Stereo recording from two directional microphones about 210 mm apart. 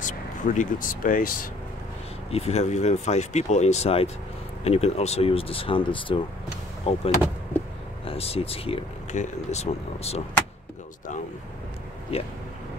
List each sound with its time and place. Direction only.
0.0 s speech: 35° left (ahead or behind)
2.3 s speech: 30° left (ahead or behind)
8.1 s speech: 30° left (ahead or behind)
12.1 s speech: 30° left (ahead or behind)